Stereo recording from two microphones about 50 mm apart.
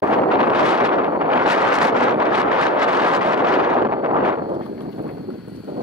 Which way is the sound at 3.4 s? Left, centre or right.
Right.